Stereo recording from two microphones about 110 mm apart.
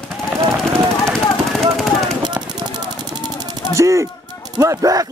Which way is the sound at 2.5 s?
40° right (ahead or behind).